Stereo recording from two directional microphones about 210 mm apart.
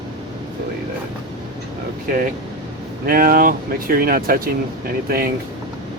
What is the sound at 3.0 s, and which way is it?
Speech, 45° right (ahead or behind).